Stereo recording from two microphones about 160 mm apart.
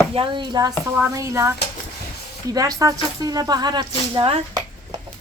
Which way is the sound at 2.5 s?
20° right (ahead or behind).